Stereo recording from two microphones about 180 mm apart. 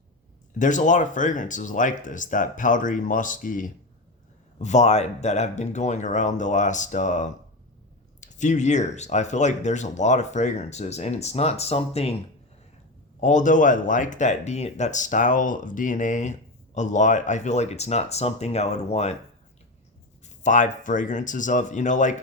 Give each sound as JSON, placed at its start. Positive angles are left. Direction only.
{"t": 0.6, "sound": "speech", "side_deg": 45}
{"t": 13.1, "sound": "speech", "side_deg": 45}
{"t": 20.4, "sound": "speech", "side_deg": 45}